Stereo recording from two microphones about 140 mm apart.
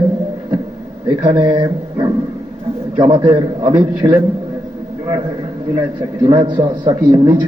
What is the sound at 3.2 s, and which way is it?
Speech, 45° right (ahead or behind).